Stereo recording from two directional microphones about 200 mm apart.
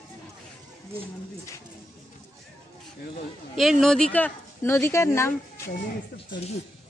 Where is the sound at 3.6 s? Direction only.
Centre (ahead or behind).